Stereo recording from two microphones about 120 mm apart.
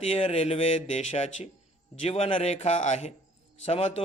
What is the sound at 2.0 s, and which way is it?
A man's voice, 60° left (ahead or behind).